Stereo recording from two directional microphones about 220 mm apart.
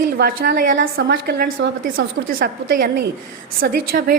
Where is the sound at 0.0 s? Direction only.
40° right (ahead or behind).